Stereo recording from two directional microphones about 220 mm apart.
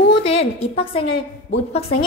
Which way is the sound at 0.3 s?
25° left (ahead or behind).